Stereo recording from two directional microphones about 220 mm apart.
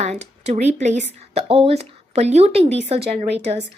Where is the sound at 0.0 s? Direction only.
30° right (ahead or behind).